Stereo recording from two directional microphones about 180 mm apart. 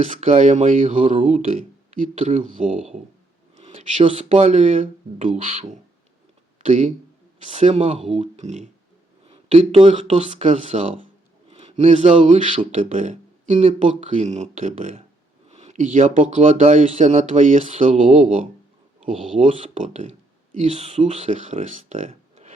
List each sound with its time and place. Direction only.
0.0 s speech: 40° right (ahead or behind)